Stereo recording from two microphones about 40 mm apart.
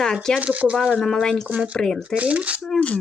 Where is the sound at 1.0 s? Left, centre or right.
Centre.